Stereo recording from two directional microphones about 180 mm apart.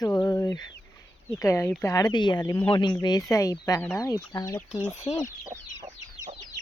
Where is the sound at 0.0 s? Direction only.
20° left (ahead or behind).